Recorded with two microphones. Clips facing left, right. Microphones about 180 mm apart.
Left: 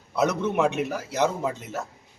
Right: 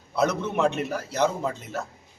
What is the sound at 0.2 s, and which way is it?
A man's voice, 10° left (ahead or behind).